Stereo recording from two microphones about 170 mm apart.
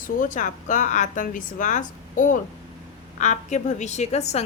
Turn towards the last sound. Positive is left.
turn(degrees=40)  # may be behind; listen again after turning